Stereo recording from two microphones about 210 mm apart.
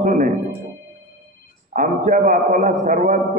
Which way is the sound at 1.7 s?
40° right (ahead or behind).